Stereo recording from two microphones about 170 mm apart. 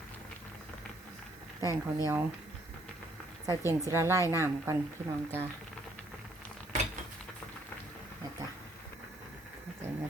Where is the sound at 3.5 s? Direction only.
15° right (ahead or behind).